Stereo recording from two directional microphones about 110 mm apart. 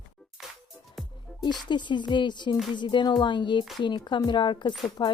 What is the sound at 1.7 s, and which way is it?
Speech, 45° left (ahead or behind).